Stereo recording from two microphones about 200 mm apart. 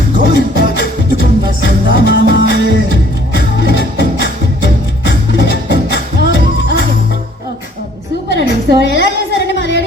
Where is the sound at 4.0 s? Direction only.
65° left (ahead or behind).